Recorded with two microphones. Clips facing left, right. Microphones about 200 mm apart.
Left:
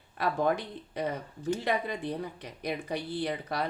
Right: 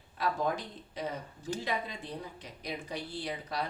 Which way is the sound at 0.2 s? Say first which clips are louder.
Left 4 dB; 60° left (ahead or behind).